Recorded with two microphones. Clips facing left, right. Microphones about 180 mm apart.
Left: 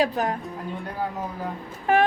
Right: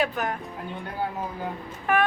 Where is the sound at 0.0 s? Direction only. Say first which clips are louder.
Left 3 dB; 35° left (ahead or behind).